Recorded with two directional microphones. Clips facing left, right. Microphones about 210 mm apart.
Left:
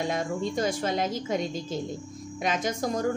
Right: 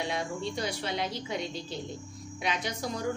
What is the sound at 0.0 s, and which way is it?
A woman's voice, 45° left (ahead or behind).